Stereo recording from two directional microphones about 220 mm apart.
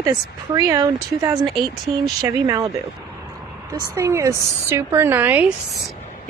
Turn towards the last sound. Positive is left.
turn(degrees=-5)  # may be behind; listen again after turning